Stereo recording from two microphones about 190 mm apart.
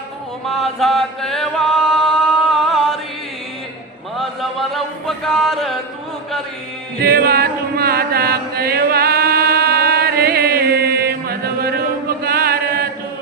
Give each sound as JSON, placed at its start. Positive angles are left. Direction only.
{"t": 0.4, "sound": "chant", "side_deg": 0}
{"t": 4.2, "sound": "chant", "side_deg": 0}
{"t": 7.0, "sound": "chant", "side_deg": -55}